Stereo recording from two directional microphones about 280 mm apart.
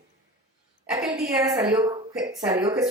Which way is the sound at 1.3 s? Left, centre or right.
Centre.